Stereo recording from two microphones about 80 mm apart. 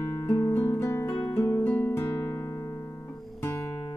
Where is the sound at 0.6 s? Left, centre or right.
Left.